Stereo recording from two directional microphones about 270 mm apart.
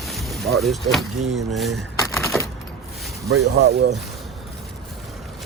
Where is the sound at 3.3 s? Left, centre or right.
Right.